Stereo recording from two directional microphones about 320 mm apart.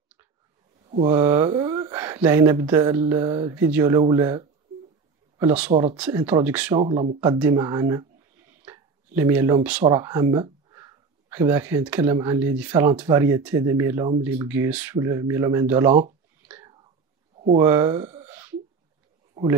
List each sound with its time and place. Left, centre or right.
0.8 s speech: centre
5.7 s speech: centre
6.8 s speech: centre
7.2 s speech: centre
15.9 s speech: centre
16.4 s whispering: centre
17.6 s speech: centre